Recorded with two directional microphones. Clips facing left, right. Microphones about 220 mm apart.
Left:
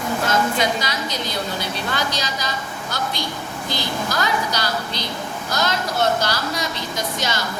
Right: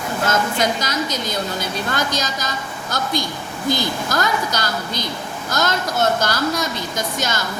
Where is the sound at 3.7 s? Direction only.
45° right (ahead or behind).